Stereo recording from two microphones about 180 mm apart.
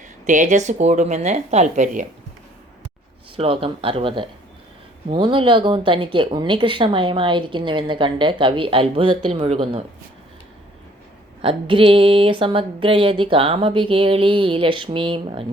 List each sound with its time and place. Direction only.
0.3 s speech: 45° right (ahead or behind)
3.3 s speech: 30° right (ahead or behind)
11.4 s speech: 30° right (ahead or behind)